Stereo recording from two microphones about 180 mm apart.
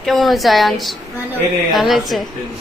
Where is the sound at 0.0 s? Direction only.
Centre (ahead or behind).